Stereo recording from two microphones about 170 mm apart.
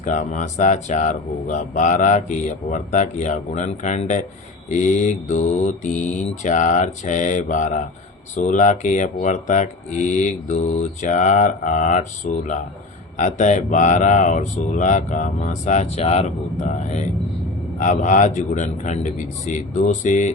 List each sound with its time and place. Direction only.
0.0 s speech: 45° left (ahead or behind)